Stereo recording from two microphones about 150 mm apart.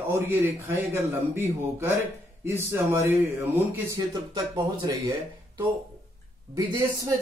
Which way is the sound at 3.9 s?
25° right (ahead or behind).